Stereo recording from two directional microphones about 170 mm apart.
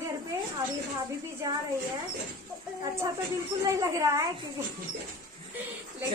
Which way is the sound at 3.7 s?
20° right (ahead or behind).